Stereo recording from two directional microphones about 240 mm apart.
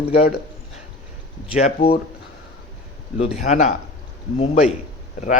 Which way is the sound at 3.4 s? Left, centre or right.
Left.